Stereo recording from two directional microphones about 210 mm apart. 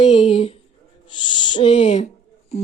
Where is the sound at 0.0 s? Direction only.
25° left (ahead or behind).